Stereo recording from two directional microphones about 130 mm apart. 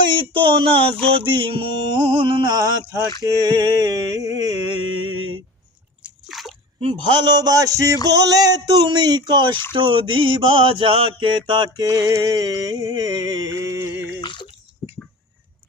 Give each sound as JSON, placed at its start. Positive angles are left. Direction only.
{"t": 0.1, "sound": "mantra", "side_deg": -40}
{"t": 3.2, "sound": "a sound", "side_deg": -30}
{"t": 6.0, "sound": "splash", "side_deg": 0}
{"t": 6.8, "sound": "a sound", "side_deg": -35}
{"t": 8.0, "sound": "mantra", "side_deg": -30}
{"t": 14.1, "sound": "bathtub", "side_deg": 35}